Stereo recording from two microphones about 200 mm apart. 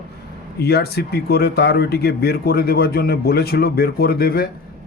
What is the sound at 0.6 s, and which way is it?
Speech, 50° left (ahead or behind).